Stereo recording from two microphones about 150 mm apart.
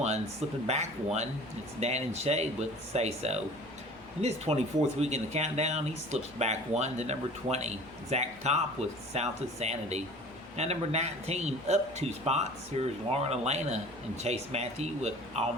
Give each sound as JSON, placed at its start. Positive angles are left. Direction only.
{"t": 0.7, "sound": "speech", "side_deg": -50}